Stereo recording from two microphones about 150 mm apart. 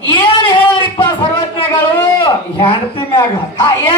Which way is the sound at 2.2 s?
35° left (ahead or behind).